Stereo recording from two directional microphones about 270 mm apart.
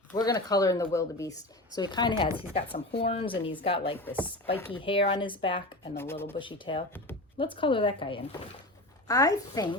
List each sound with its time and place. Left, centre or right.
0.1 s speech: centre
4.0 s speech: centre
4.8 s speech: centre
6.0 s speech: centre